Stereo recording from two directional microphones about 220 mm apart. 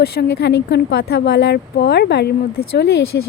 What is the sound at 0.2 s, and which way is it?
A woman's voice, 50° left (ahead or behind).